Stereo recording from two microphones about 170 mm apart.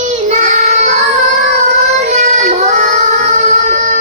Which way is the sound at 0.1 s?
40° right (ahead or behind).